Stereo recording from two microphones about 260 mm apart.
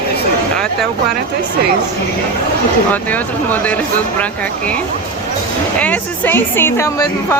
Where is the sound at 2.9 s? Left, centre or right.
Centre.